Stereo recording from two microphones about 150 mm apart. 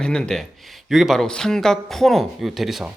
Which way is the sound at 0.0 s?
5° left (ahead or behind).